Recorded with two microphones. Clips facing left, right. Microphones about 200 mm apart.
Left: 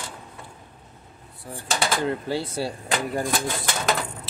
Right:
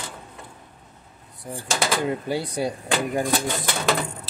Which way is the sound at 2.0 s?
15° right (ahead or behind).